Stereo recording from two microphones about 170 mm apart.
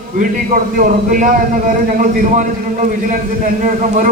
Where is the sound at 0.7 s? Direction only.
55° right (ahead or behind).